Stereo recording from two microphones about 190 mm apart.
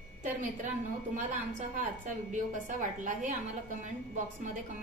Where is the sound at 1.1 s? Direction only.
40° right (ahead or behind).